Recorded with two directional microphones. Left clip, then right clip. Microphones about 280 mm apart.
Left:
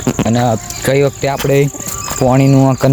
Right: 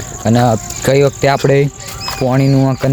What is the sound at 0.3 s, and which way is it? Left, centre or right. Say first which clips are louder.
Cricket: right 3 dB; centre.